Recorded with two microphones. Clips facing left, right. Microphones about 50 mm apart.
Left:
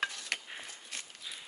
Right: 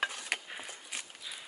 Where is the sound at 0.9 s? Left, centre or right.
Centre.